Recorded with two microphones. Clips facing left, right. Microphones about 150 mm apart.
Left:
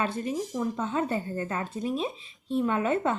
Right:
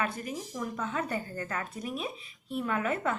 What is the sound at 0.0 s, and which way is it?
A woman's voice, 25° left (ahead or behind).